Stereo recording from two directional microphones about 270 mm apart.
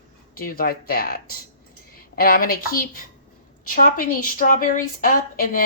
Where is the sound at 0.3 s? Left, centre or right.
Left.